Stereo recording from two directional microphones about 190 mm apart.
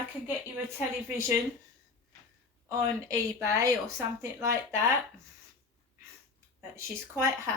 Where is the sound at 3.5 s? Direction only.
15° right (ahead or behind).